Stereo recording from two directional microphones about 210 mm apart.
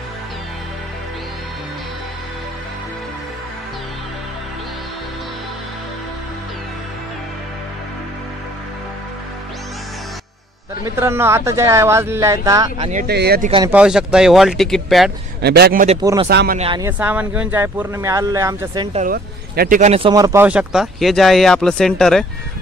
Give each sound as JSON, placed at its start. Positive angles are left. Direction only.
{"t": 10.8, "sound": "speech", "side_deg": -10}
{"t": 13.0, "sound": "speech", "side_deg": -50}
{"t": 13.7, "sound": "speech", "side_deg": -5}
{"t": 15.4, "sound": "speech", "side_deg": -50}
{"t": 16.0, "sound": "speech", "side_deg": -15}
{"t": 16.3, "sound": "speech", "side_deg": -50}
{"t": 16.5, "sound": "speech", "side_deg": -25}
{"t": 16.8, "sound": "speech", "side_deg": -10}
{"t": 18.9, "sound": "speech", "side_deg": -45}